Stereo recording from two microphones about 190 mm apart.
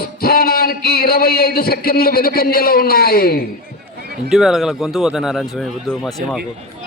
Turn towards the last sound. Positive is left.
turn(degrees=0)  # may be behind; listen again after turning